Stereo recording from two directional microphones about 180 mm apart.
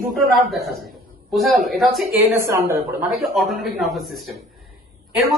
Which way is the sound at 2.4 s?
15° right (ahead or behind).